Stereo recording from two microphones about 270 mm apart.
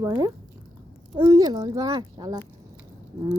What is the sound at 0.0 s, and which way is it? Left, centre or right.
Speech, centre.